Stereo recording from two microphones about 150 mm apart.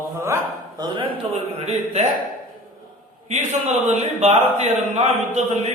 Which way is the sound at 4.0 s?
45° right (ahead or behind).